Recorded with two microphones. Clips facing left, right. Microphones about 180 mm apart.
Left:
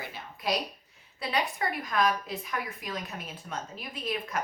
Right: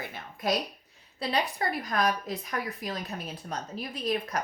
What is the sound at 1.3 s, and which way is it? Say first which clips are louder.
A woman's voice: right 1 dB; 35° right (ahead or behind).